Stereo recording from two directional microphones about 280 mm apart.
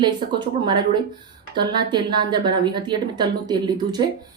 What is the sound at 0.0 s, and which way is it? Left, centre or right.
A woman's voice, centre.